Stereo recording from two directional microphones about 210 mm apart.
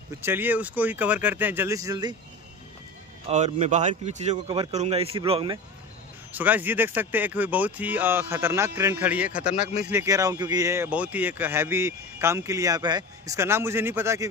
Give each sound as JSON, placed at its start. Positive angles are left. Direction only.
{"t": 0.2, "sound": "speech", "side_deg": -10}
{"t": 3.3, "sound": "speech", "side_deg": -30}
{"t": 6.3, "sound": "speech", "side_deg": -10}
{"t": 9.6, "sound": "speech", "side_deg": 35}
{"t": 9.8, "sound": "speech", "side_deg": -15}